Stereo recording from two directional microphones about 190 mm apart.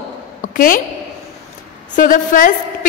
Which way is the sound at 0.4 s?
45° left (ahead or behind).